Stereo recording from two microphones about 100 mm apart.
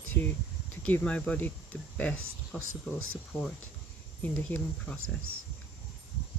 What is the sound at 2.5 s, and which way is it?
Speech, 15° left (ahead or behind).